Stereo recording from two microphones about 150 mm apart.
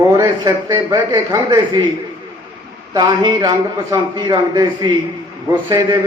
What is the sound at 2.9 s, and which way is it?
A man's voice, 30° right (ahead or behind).